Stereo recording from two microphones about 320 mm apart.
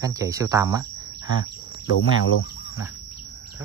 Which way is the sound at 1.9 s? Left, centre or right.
Left.